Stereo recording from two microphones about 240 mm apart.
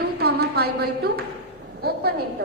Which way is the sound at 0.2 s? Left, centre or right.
Right.